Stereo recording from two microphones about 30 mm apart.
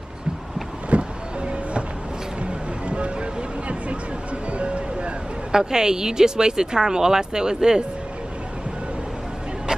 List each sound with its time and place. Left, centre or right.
0.8 s vehicle: right
2.9 s music: right
4.5 s a sound: right
5.5 s speech: right